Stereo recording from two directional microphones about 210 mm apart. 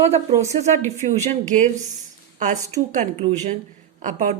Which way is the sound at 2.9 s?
35° right (ahead or behind).